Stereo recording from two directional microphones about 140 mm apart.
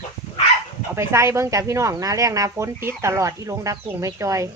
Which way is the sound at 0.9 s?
20° right (ahead or behind).